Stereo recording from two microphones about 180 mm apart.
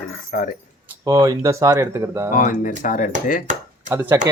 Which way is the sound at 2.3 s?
45° left (ahead or behind).